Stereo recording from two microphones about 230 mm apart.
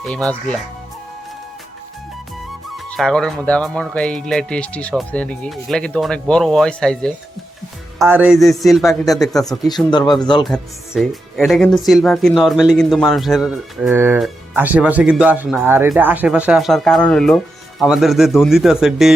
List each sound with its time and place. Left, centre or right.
0.0 s speech: centre
2.7 s speech: centre
7.9 s speech: centre
9.4 s speech: centre
10.4 s speech: centre